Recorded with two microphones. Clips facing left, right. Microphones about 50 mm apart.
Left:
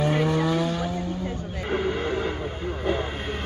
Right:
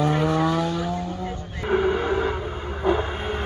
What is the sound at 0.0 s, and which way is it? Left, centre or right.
Vehicle, centre.